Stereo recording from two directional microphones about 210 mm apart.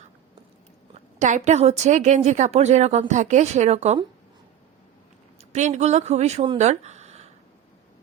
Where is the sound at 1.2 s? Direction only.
35° right (ahead or behind).